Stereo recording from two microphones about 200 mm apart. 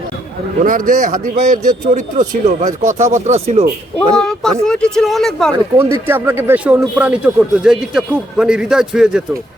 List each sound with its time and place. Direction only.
0.6 s speech: 40° right (ahead or behind)
4.1 s speech: 5° left (ahead or behind)
6.1 s speech: 10° right (ahead or behind)